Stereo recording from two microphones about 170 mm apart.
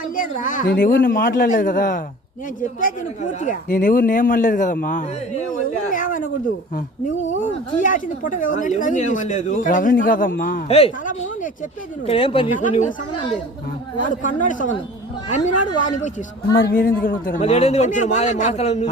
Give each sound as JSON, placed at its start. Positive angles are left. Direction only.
{"t": 0.2, "sound": "speech", "side_deg": 50}
{"t": 3.4, "sound": "speech", "side_deg": 50}
{"t": 7.8, "sound": "speech", "side_deg": 50}
{"t": 10.7, "sound": "a man's voice", "side_deg": 35}
{"t": 12.0, "sound": "a man's voice", "side_deg": 35}
{"t": 14.2, "sound": "speech", "side_deg": 50}
{"t": 15.8, "sound": "speech", "side_deg": 45}
{"t": 16.6, "sound": "a man's voice", "side_deg": 60}
{"t": 17.4, "sound": "a man's voice", "side_deg": 40}